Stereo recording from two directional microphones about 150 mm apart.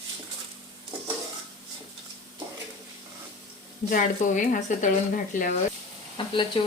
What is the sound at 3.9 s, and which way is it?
Speech, 60° left (ahead or behind).